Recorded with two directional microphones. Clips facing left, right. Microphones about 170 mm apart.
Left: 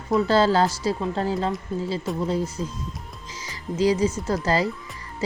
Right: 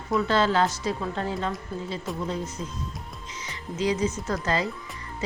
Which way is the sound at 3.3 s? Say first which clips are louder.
Left 6 dB; 35° left (ahead or behind).